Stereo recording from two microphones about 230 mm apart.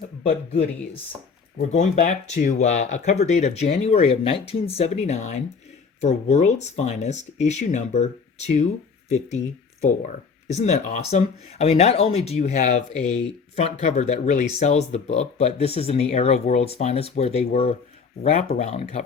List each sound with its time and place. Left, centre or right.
1.5 s speech: left
10.5 s speech: left